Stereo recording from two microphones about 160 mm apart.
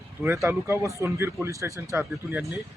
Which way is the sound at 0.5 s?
15° right (ahead or behind).